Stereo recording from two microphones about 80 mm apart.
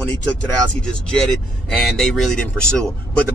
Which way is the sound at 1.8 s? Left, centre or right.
Centre.